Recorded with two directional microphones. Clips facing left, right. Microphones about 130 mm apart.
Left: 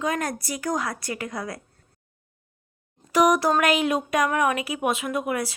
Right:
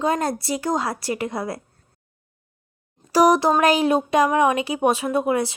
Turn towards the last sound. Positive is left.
turn(degrees=-25)  # may be behind; listen again after turning